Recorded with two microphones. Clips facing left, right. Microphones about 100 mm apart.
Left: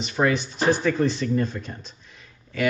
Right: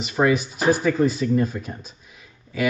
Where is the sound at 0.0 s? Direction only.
5° right (ahead or behind).